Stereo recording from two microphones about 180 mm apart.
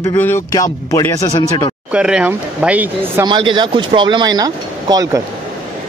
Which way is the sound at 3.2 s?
25° right (ahead or behind).